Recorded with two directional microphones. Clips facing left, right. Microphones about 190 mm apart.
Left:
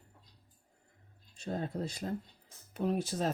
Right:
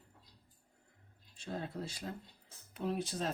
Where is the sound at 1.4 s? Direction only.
45° left (ahead or behind).